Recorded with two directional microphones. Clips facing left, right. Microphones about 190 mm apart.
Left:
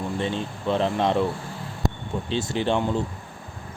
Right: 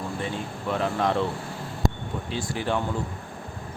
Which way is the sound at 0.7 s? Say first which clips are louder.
Left 3 dB; 25° left (ahead or behind).